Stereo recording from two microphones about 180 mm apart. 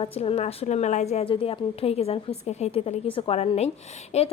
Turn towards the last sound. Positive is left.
turn(degrees=35)  # may be behind; listen again after turning